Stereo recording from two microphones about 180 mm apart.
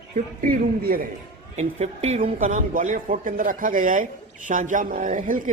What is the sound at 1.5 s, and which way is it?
Speech, 35° right (ahead or behind).